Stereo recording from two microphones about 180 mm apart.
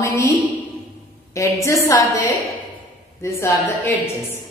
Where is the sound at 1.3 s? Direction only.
15° left (ahead or behind).